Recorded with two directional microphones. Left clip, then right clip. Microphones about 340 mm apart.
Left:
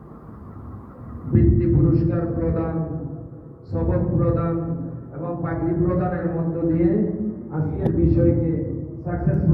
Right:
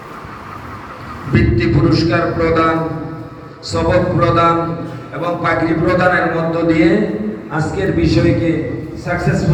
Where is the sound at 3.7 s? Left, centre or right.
Right.